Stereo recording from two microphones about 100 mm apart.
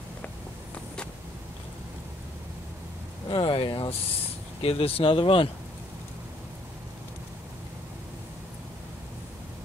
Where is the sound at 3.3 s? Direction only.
60° left (ahead or behind).